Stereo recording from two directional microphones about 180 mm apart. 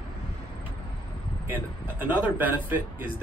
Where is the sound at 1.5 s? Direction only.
10° right (ahead or behind).